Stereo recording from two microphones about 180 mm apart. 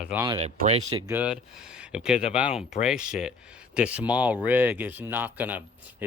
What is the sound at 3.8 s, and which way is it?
Speech, 5° right (ahead or behind).